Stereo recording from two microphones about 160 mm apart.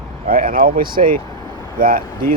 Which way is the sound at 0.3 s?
60° right (ahead or behind).